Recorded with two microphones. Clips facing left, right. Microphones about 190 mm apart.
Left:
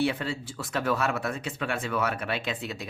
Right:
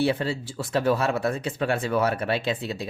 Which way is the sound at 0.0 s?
35° right (ahead or behind).